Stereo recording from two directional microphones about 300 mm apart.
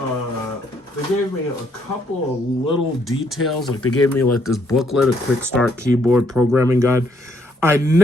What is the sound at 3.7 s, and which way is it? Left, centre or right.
Speech, left.